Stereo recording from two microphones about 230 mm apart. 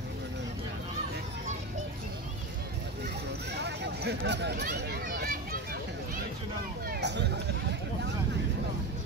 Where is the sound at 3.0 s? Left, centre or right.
Right.